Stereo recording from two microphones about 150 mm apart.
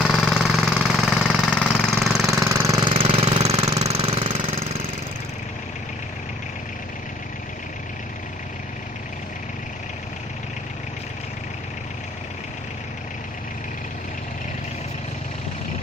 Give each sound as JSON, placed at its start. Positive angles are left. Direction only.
{"t": 0.0, "sound": "jackhammer", "side_deg": 0}
{"t": 2.5, "sound": "jackhammer", "side_deg": -25}
{"t": 2.9, "sound": "jackhammer", "side_deg": -40}